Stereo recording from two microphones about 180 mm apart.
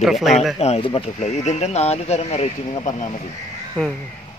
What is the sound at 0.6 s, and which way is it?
Speech, 35° left (ahead or behind).